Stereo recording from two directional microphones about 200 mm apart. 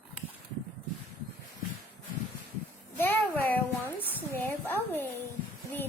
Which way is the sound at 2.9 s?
10° left (ahead or behind).